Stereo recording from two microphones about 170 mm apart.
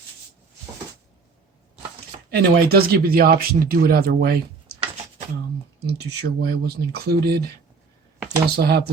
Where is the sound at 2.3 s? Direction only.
70° right (ahead or behind).